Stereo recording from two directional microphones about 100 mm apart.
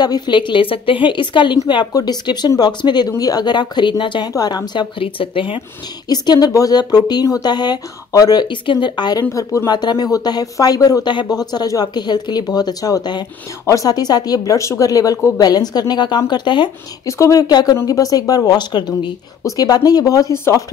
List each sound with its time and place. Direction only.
0.0 s speech: 45° left (ahead or behind)
1.9 s speech: 40° left (ahead or behind)
4.3 s speech: 40° left (ahead or behind)
4.9 s speech: 65° left (ahead or behind)
6.0 s speech: 45° left (ahead or behind)
9.3 s speech: 35° left (ahead or behind); by 16.7 s 50° left (ahead or behind)
17.0 s speech: 35° left (ahead or behind)